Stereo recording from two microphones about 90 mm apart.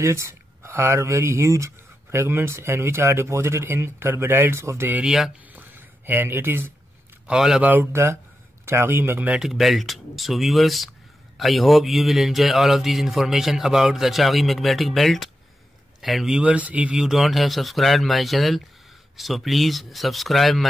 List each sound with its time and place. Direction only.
0.0 s speech: 30° right (ahead or behind)
5.0 s speech: 5° right (ahead or behind)
5.5 s a sound: 20° right (ahead or behind)
7.2 s speech: 5° right (ahead or behind)
7.6 s speech: 20° right (ahead or behind)
9.3 s speech: centre (ahead or behind)